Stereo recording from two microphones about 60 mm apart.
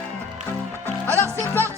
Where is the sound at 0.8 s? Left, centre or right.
Left.